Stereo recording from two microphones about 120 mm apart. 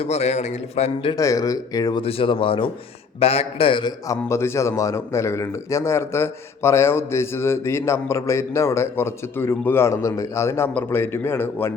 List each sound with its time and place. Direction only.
0.0 s a man's voice: 60° left (ahead or behind)
1.1 s a man's voice: 30° left (ahead or behind)
2.0 s a man's voice: 50° left (ahead or behind)
4.3 s a man's voice: 20° left (ahead or behind)